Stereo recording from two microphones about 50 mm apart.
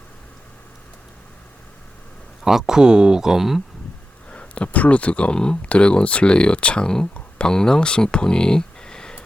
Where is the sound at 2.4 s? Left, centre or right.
Centre.